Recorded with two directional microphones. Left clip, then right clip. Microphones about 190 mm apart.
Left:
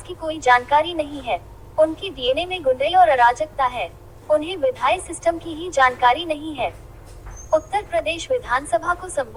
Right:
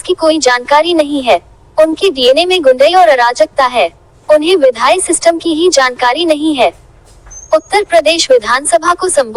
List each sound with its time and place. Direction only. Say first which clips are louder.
0.2 s a woman's voice: right 6 dB; 55° right (ahead or behind)